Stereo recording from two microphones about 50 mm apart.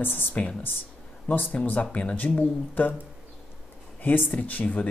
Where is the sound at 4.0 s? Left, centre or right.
Left.